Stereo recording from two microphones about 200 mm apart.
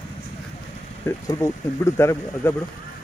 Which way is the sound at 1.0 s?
15° left (ahead or behind).